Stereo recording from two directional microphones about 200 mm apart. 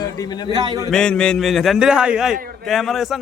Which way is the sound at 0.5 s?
20° right (ahead or behind).